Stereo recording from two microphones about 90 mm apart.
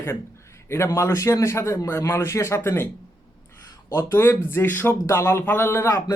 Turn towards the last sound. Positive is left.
turn(degrees=35)  # may be behind; listen again after turning